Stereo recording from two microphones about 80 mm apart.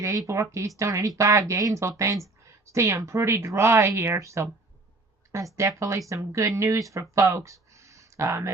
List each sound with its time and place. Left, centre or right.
0.0 s speech: right